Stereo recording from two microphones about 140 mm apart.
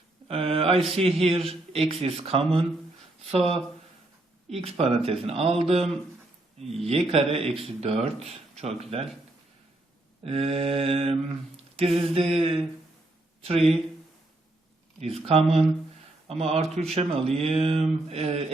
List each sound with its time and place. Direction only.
0.3 s mantra: 45° right (ahead or behind)
0.9 s speech: 45° right (ahead or behind)
6.8 s speech: 45° right (ahead or behind)
10.2 s speech: 45° right (ahead or behind)
15.1 s speech: 45° right (ahead or behind)